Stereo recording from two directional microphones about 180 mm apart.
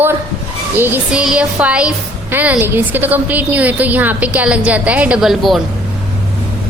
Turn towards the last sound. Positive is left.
turn(degrees=0)  # may be behind; listen again after turning